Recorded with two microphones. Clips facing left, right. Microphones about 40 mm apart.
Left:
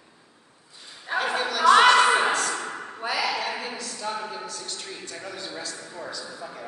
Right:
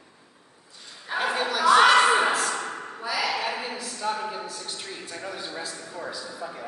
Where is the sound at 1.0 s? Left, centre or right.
Centre.